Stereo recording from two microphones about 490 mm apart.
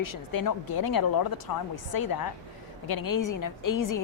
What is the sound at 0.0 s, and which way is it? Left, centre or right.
A woman's voice, left.